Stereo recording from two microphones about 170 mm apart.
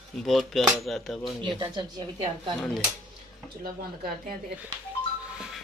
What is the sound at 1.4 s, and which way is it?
Speech, 25° right (ahead or behind).